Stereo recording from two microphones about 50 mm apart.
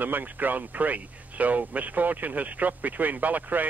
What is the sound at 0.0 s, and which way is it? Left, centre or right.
Speech, right.